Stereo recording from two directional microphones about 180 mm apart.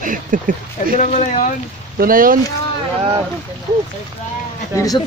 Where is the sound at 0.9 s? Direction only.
40° left (ahead or behind).